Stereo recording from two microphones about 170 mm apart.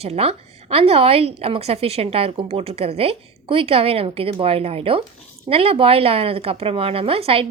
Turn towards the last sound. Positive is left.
turn(degrees=-35)  # may be behind; listen again after turning